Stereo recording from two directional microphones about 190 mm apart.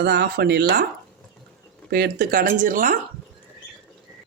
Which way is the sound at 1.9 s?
50° right (ahead or behind).